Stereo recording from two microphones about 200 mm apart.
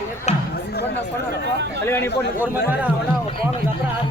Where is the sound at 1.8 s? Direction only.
10° left (ahead or behind).